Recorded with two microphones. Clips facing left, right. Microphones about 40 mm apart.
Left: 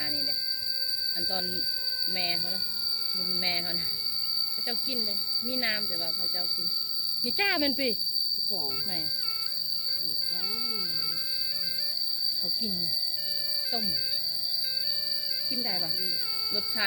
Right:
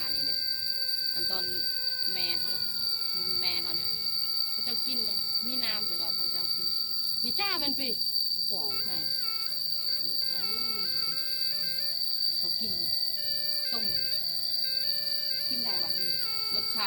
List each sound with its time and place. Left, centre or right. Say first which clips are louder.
7.3 s speech: left 7 dB; left